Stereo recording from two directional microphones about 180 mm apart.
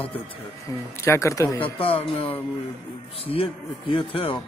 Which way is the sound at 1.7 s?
30° left (ahead or behind).